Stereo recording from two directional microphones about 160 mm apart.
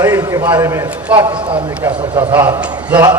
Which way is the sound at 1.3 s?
30° right (ahead or behind).